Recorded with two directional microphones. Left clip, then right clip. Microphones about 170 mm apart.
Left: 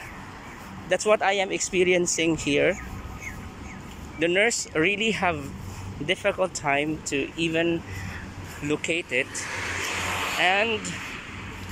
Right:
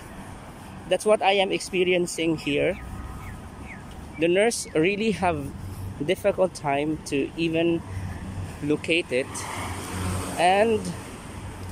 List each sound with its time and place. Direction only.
0.8 s speech: 10° right (ahead or behind)
4.2 s speech: 15° right (ahead or behind)
9.6 s music: 65° right (ahead or behind)
10.4 s speech: 25° right (ahead or behind)